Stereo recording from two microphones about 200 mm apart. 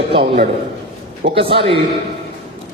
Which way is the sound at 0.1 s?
25° right (ahead or behind).